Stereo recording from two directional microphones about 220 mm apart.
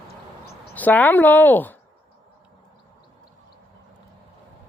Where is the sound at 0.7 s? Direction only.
5° left (ahead or behind).